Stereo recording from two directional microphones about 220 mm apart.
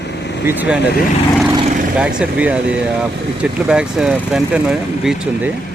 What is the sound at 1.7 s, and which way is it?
Vehicle, 35° right (ahead or behind).